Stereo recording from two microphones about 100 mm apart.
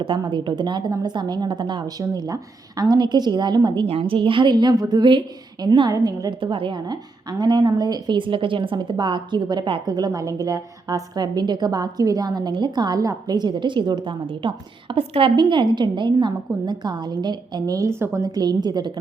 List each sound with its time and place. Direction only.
0.0 s a woman's voice: 55° right (ahead or behind)
3.8 s a woman's voice: 70° right (ahead or behind); by 5.9 s 50° right (ahead or behind)
5.9 s a woman's voice: 35° right (ahead or behind)
6.4 s a woman's voice: 60° right (ahead or behind)
9.8 s a woman's voice: 40° right (ahead or behind); by 15.3 s 65° right (ahead or behind)
15.4 s a woman's voice: 50° right (ahead or behind)
17.8 s a woman's voice: 30° right (ahead or behind); by 18.9 s 45° right (ahead or behind)